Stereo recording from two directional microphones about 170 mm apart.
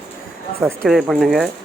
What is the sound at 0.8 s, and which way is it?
Speech, centre (ahead or behind).